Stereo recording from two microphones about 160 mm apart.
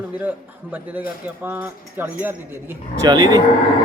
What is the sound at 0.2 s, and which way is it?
Speech, 10° right (ahead or behind).